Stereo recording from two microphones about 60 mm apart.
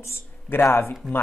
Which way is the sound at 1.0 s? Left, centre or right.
Centre.